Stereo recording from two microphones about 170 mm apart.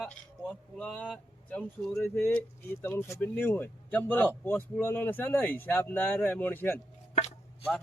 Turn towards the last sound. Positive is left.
turn(degrees=40)  # may be behind; listen again after turning